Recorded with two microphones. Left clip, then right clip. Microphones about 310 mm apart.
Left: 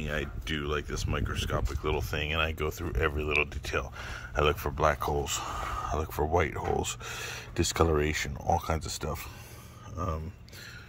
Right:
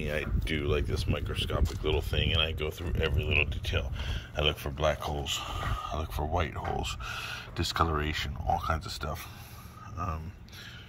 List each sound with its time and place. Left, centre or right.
0.0 s speech: centre